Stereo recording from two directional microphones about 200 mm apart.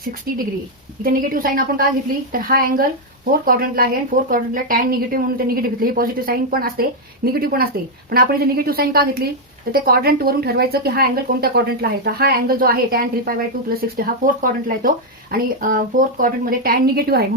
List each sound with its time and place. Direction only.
1.1 s speech: 45° right (ahead or behind)